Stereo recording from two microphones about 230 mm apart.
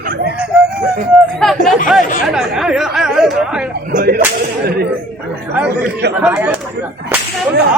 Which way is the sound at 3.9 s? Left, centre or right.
Right.